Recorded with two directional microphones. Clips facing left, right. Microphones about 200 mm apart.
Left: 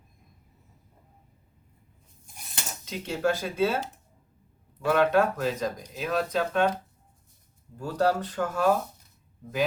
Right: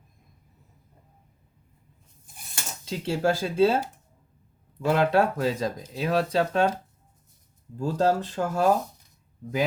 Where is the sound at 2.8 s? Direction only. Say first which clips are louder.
Right 2 dB; 30° right (ahead or behind).